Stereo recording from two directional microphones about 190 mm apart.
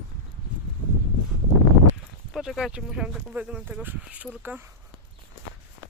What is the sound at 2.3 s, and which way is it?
Speech, centre (ahead or behind).